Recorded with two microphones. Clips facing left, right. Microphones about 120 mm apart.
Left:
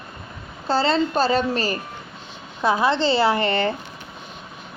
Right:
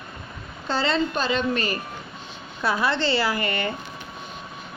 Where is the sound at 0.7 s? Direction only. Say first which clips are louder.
Left 4 dB; 35° left (ahead or behind).